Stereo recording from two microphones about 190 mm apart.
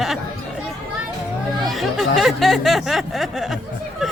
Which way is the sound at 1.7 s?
Centre (ahead or behind).